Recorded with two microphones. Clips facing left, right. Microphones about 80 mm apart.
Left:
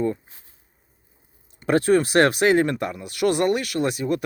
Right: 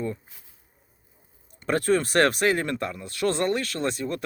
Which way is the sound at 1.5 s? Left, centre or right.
Centre.